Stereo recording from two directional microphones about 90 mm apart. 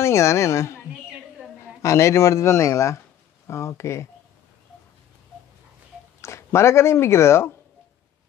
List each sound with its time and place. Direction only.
0.0 s a woman's voice: 30° left (ahead or behind)
6.2 s speech: 30° left (ahead or behind)